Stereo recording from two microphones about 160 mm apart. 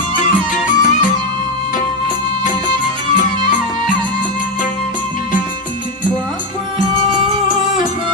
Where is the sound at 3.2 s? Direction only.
50° left (ahead or behind).